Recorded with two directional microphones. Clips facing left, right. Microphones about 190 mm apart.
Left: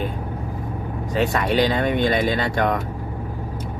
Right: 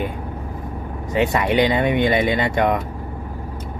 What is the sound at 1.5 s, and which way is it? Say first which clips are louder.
Speech: right 2 dB; 15° right (ahead or behind).